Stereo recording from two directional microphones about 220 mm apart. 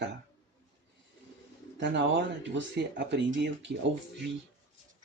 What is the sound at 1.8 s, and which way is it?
Speech, 50° right (ahead or behind).